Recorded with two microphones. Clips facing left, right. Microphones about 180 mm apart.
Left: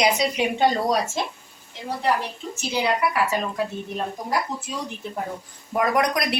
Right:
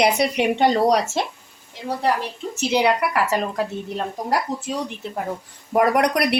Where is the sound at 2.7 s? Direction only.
75° right (ahead or behind).